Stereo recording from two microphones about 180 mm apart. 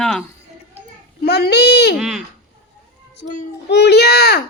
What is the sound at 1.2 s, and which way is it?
Speech, 65° left (ahead or behind).